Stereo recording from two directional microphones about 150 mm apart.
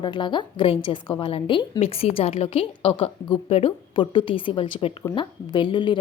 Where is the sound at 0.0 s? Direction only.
30° left (ahead or behind).